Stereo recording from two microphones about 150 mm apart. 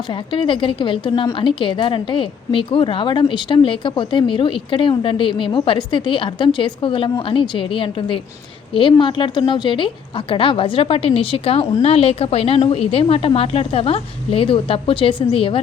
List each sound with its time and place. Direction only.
0.1 s a woman's voice: 35° left (ahead or behind)